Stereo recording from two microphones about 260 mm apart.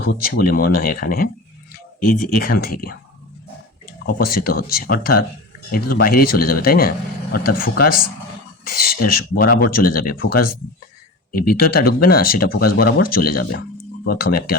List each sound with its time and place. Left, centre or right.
0.0 s speech: left
4.0 s speech: left
11.3 s speech: left